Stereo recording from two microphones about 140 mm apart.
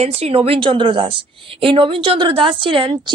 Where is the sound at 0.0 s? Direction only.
45° right (ahead or behind).